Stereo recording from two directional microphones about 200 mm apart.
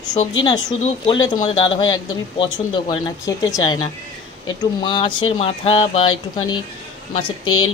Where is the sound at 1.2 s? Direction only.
20° left (ahead or behind).